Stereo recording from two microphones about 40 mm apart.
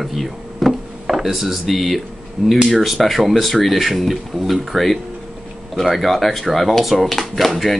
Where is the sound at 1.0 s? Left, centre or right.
Centre.